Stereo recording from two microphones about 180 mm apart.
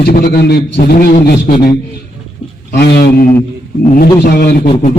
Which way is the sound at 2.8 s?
65° left (ahead or behind).